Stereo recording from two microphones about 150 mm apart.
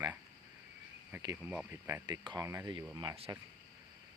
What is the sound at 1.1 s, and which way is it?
Speech, 15° right (ahead or behind).